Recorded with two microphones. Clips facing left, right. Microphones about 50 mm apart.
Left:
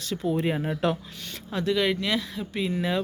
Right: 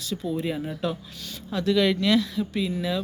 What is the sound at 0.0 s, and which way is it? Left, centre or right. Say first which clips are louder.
Speech: left 2 dB; left.